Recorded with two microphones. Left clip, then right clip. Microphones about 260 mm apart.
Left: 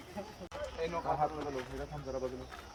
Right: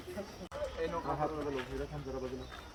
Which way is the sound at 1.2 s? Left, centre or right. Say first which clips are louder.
Left 1 dB; left.